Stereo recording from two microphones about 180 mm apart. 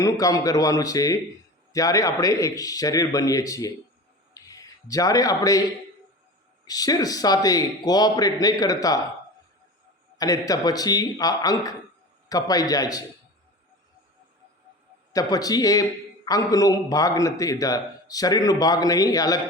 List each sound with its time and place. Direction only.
0.0 s a man's voice: 20° left (ahead or behind)
4.4 s a sound: 20° left (ahead or behind)
6.7 s a man's voice: 20° left (ahead or behind)
10.2 s a man's voice: 20° left (ahead or behind)
15.1 s a man's voice: 20° left (ahead or behind)